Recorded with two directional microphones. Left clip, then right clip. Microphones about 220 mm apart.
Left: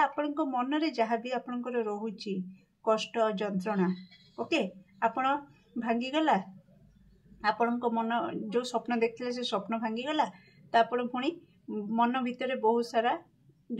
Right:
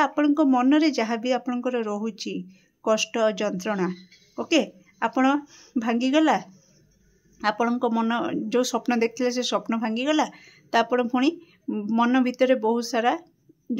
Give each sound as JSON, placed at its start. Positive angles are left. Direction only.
{"t": 0.0, "sound": "speech", "side_deg": -45}